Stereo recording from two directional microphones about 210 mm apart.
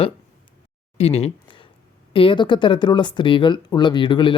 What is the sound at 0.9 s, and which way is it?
Speech, 30° left (ahead or behind).